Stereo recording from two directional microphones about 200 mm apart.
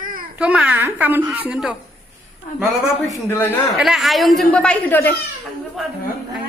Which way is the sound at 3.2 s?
10° left (ahead or behind).